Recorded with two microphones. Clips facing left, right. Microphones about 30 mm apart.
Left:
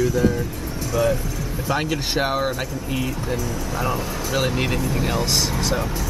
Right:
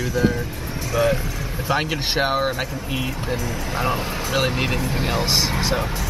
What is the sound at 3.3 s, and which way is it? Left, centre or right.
Speech, right.